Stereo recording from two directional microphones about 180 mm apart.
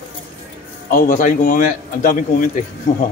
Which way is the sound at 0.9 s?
45° left (ahead or behind).